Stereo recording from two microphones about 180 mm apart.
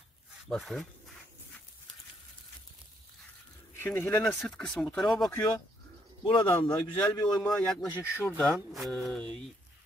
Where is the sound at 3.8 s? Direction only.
10° left (ahead or behind).